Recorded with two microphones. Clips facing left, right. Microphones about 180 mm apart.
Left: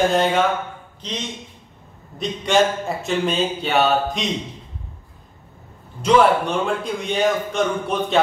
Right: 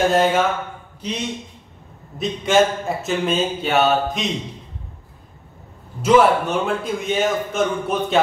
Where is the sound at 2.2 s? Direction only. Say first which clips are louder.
Right 1 dB; centre (ahead or behind).